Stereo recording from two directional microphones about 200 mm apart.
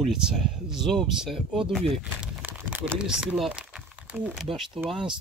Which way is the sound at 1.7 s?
Centre (ahead or behind).